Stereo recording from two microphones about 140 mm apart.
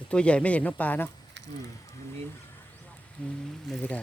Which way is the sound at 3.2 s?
10° left (ahead or behind).